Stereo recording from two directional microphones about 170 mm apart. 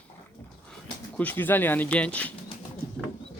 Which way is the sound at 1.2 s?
10° left (ahead or behind).